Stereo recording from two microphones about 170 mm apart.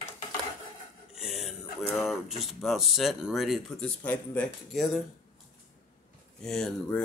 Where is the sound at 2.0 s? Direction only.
Centre (ahead or behind).